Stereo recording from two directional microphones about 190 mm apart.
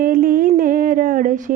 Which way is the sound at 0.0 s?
50° right (ahead or behind).